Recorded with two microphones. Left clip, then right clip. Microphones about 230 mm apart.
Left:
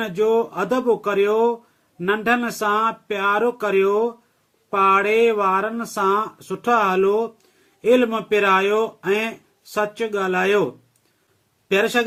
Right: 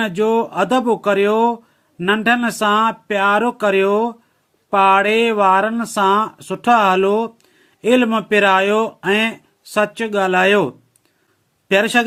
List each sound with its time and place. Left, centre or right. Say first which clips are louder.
0.0 s speech: right 2 dB; right
11.7 s speech: right 4 dB; right